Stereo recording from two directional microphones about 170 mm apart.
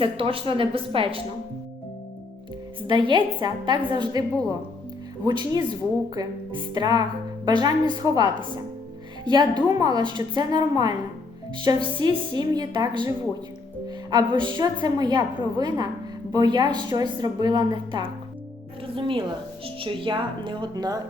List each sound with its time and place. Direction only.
0.0 s a woman's voice: 30° right (ahead or behind)
2.8 s a woman's voice: 30° right (ahead or behind)
5.2 s a woman's voice: 25° right (ahead or behind)